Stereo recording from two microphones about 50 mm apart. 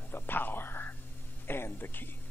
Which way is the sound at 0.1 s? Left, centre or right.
Left.